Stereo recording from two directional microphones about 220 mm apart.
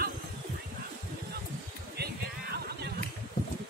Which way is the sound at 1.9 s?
45° right (ahead or behind).